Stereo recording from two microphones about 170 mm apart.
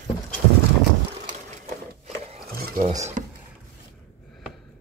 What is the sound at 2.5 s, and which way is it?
Stir, 60° right (ahead or behind).